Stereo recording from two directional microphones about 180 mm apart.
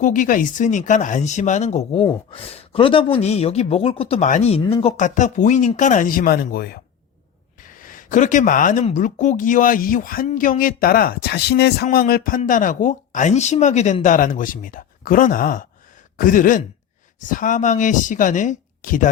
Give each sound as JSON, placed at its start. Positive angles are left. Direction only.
{"t": 0.0, "sound": "a man's voice", "side_deg": 45}
{"t": 7.8, "sound": "speech", "side_deg": 45}